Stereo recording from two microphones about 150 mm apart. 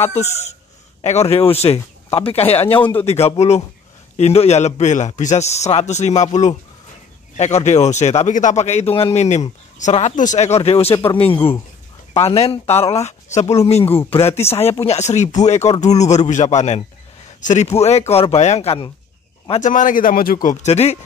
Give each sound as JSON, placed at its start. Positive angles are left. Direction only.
{"t": 0.1, "sound": "a man's voice", "side_deg": 45}
{"t": 2.8, "sound": "speech", "side_deg": 15}
{"t": 3.1, "sound": "a man's voice", "side_deg": 45}
{"t": 12.1, "sound": "a man's voice", "side_deg": 40}
{"t": 19.6, "sound": "a man's voice", "side_deg": 60}
{"t": 20.4, "sound": "a man's voice", "side_deg": 45}